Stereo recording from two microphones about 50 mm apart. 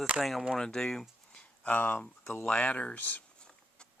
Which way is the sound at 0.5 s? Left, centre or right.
Centre.